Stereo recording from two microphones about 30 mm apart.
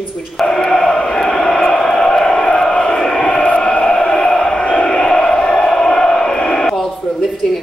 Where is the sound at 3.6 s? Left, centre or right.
Left.